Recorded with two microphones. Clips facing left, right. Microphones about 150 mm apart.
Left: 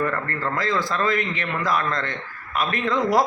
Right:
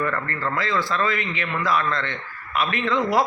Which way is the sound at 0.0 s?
35° left (ahead or behind).